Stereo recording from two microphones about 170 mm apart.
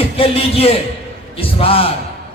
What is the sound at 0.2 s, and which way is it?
Speech, 35° left (ahead or behind).